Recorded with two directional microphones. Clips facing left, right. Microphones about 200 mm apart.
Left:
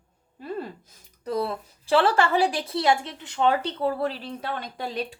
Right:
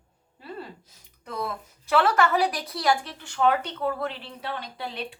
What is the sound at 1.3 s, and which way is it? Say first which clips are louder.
A woman's voice: left 5 dB; 35° left (ahead or behind).